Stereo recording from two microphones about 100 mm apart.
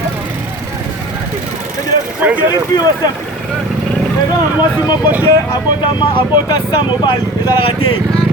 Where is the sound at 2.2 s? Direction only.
15° right (ahead or behind).